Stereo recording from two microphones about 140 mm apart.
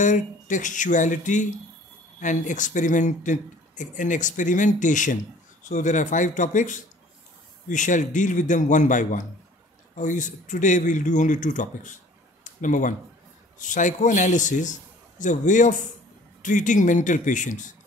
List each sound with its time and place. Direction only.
0.0 s speech: 65° left (ahead or behind)